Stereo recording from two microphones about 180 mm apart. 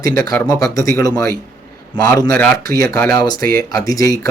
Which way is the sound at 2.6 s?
55° right (ahead or behind).